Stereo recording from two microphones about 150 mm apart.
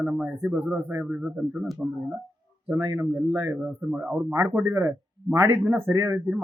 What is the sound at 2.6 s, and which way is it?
A man's voice, 20° right (ahead or behind).